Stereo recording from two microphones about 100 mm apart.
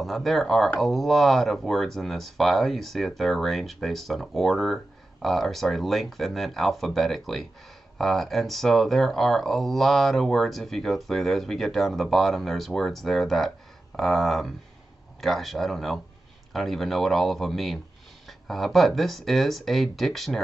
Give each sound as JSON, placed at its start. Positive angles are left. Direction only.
{"t": 0.0, "sound": "speech", "side_deg": 0}